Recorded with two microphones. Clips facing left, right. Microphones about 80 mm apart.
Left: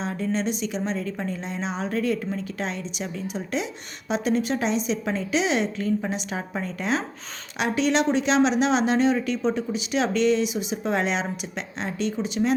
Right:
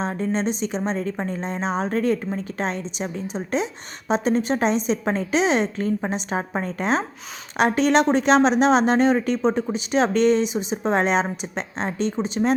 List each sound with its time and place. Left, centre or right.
0.0 s speech: right